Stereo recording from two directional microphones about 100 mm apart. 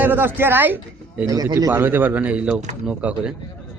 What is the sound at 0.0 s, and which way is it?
A man's voice, 20° right (ahead or behind).